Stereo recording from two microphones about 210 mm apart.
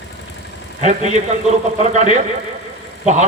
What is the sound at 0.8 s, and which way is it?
A man's voice, 35° right (ahead or behind).